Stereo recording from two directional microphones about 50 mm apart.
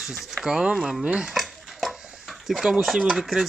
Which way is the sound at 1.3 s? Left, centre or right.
Centre.